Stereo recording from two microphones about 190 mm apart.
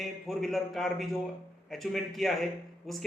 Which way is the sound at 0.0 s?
Centre (ahead or behind).